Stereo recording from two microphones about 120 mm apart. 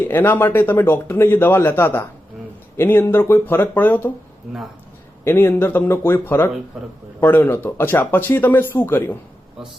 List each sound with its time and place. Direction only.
0.0 s speech: 15° left (ahead or behind)
5.2 s speech: 20° left (ahead or behind)